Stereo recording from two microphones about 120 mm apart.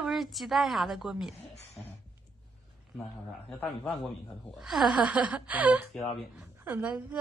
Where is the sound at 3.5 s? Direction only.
10° left (ahead or behind).